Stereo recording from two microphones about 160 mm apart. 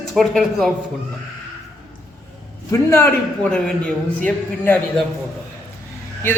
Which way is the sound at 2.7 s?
15° left (ahead or behind).